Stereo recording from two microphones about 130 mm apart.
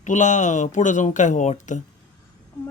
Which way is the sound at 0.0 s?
70° left (ahead or behind).